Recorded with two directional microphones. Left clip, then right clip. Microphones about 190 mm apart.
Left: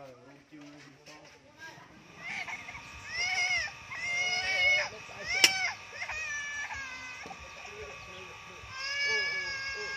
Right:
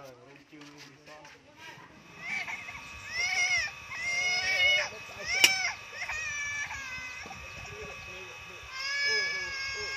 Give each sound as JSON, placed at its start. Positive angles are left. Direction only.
{"t": 2.2, "sound": "splash", "side_deg": -35}
{"t": 3.1, "sound": "baby cry", "side_deg": -35}
{"t": 8.7, "sound": "music", "side_deg": -35}